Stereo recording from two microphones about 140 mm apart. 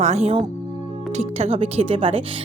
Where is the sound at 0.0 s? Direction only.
50° right (ahead or behind).